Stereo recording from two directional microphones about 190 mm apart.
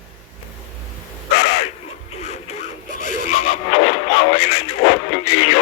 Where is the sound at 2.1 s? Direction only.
35° left (ahead or behind).